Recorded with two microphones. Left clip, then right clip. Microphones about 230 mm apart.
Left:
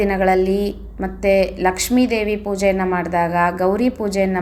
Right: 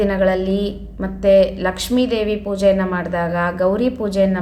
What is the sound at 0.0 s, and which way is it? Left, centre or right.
A woman's voice, centre.